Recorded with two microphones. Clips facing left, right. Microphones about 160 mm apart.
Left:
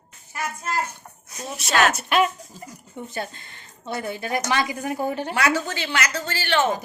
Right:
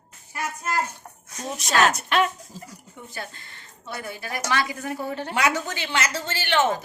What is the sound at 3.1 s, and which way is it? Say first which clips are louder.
A woman's voice: left 4 dB; 20° left (ahead or behind).